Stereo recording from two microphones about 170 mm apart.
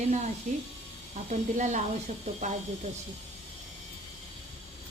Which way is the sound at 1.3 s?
45° right (ahead or behind).